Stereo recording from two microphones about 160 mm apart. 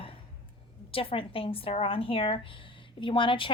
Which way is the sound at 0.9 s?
35° left (ahead or behind).